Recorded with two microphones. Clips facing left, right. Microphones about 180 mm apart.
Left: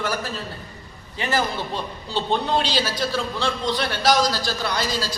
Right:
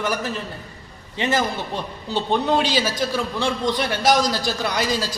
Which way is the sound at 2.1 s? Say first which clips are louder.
Right 2 dB; 50° right (ahead or behind).